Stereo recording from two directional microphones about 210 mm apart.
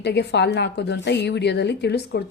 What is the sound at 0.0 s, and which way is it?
A woman's voice, 55° left (ahead or behind).